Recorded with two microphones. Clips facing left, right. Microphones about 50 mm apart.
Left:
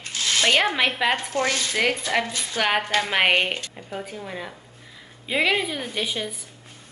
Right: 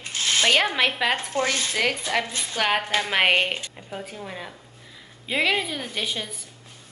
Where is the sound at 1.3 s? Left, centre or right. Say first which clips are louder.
Even; right.